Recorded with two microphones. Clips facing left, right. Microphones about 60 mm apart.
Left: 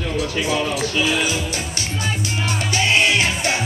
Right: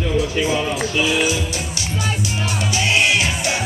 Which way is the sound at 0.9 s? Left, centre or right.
Left.